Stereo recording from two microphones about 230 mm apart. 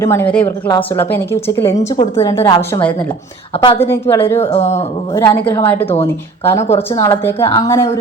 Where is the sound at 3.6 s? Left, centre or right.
Left.